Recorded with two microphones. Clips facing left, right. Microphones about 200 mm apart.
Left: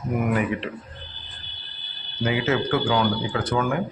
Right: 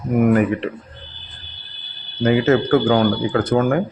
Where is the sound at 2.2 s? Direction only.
45° right (ahead or behind).